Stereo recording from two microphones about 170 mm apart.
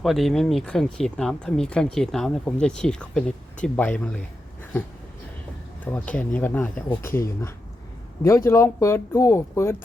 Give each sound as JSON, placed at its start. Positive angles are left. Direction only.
{"t": 0.0, "sound": "speech", "side_deg": 0}
{"t": 5.8, "sound": "speech", "side_deg": 10}